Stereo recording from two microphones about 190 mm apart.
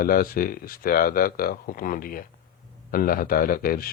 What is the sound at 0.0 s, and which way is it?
Speech, 50° left (ahead or behind).